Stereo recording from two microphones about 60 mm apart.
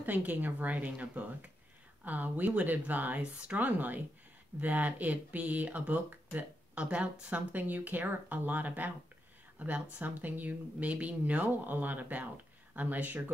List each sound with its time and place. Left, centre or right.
0.0 s speech: right